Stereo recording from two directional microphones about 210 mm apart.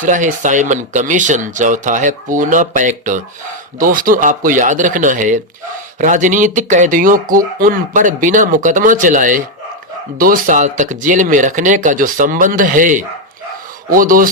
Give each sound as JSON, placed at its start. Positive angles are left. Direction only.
{"t": 0.0, "sound": "speech", "side_deg": -35}